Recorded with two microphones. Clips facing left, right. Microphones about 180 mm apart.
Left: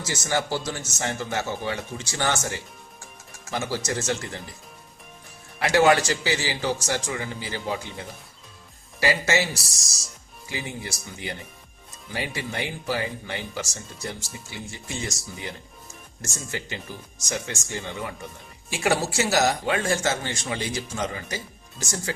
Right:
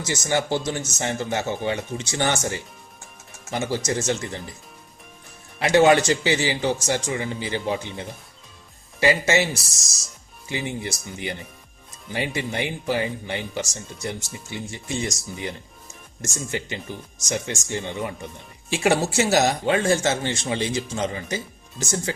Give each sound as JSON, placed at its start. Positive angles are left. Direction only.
{"t": 0.1, "sound": "speech", "side_deg": -20}
{"t": 3.5, "sound": "speech", "side_deg": -20}
{"t": 5.5, "sound": "speech", "side_deg": -20}
{"t": 12.1, "sound": "speech", "side_deg": -20}